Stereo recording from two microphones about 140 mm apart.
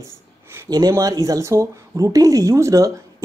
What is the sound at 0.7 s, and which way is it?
Speech, 30° right (ahead or behind).